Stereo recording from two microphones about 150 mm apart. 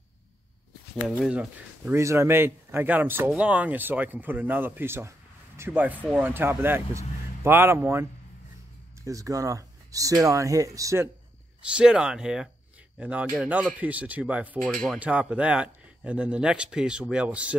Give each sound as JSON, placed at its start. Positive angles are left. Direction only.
{"t": 1.0, "sound": "speech", "side_deg": -5}
{"t": 11.7, "sound": "speech", "side_deg": -5}